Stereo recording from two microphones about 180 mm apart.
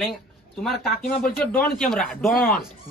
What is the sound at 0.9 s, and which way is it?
Speech, 50° left (ahead or behind).